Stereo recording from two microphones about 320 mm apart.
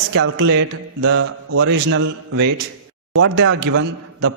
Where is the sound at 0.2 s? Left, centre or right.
Right.